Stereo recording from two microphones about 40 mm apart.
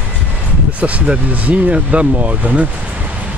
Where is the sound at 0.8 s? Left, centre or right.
Right.